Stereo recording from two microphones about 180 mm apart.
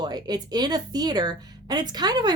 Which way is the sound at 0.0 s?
20° right (ahead or behind).